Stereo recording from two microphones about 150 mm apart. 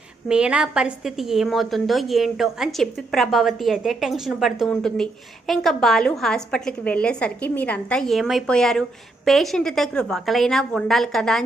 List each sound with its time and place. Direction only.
0.3 s a woman's voice: 5° right (ahead or behind)